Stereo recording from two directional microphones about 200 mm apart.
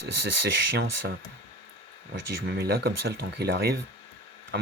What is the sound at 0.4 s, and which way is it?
Speech, 55° right (ahead or behind).